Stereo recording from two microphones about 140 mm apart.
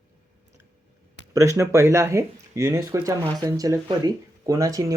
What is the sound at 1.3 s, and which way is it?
Speech, 20° right (ahead or behind).